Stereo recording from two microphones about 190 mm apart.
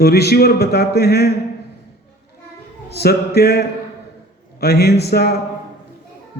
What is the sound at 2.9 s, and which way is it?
A man's voice, 55° left (ahead or behind).